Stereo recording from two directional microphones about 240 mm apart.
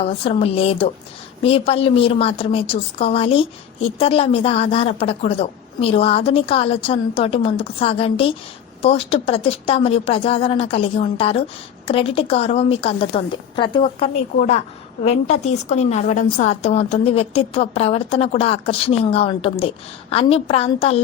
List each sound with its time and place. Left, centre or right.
0.0 s a woman's voice: left